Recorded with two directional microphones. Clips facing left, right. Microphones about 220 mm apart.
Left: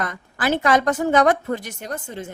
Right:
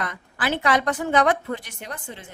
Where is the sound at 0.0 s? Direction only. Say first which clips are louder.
Left 4 dB; 45° left (ahead or behind).